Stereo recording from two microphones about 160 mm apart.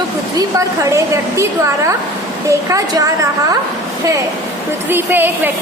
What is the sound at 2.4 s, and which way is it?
Speech, 20° right (ahead or behind).